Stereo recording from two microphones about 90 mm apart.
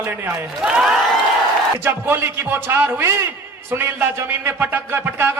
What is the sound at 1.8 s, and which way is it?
A man's voice, 25° right (ahead or behind).